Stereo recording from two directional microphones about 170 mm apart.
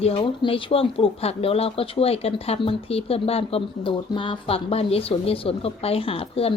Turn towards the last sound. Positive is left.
turn(degrees=35)  # may be behind; listen again after turning